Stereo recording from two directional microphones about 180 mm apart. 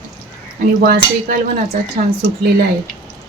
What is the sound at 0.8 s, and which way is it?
Speech, 55° right (ahead or behind).